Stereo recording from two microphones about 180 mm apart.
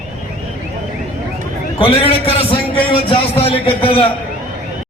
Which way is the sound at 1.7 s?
30° left (ahead or behind).